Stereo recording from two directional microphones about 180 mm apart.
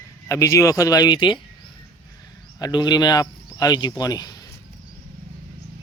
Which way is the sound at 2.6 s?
25° left (ahead or behind).